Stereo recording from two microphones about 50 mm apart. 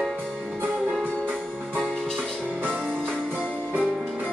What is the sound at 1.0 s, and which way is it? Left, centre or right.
Music, right.